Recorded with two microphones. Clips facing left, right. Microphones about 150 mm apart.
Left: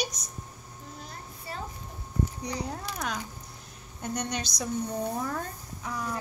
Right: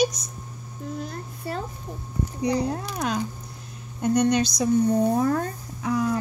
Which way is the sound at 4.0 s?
90° right.